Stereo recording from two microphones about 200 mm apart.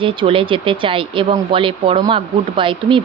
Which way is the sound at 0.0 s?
25° right (ahead or behind).